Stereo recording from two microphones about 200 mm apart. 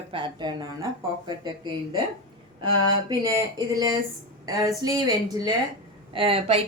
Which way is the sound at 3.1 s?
15° right (ahead or behind).